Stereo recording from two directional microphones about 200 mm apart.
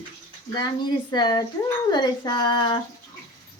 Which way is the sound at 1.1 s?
20° left (ahead or behind).